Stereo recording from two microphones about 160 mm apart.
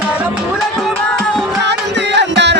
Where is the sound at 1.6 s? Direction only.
90° right.